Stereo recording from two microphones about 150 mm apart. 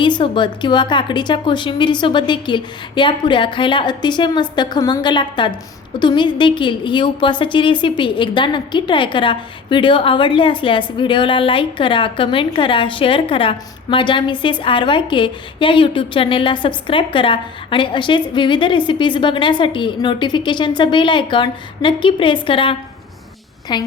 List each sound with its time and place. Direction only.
0.0 s a woman's voice: 35° left (ahead or behind)